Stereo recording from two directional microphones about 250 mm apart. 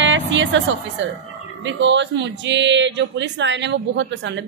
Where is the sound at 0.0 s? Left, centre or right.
Right.